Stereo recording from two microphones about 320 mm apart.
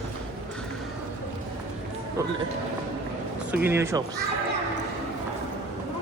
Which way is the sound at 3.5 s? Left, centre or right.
Centre.